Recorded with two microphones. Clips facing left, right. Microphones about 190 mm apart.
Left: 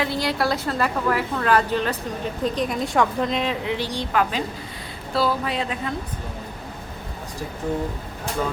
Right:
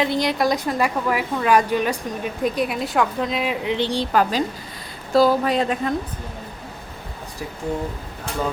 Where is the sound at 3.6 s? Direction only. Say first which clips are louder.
Right 4 dB; 20° right (ahead or behind); by 5.9 s 45° right (ahead or behind).